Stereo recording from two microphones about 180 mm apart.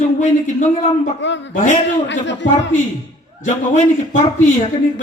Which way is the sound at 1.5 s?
45° left (ahead or behind).